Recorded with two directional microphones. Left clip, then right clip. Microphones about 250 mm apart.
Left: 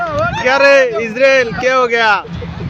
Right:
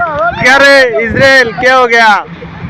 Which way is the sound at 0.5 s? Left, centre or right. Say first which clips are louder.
Right 3 dB; centre.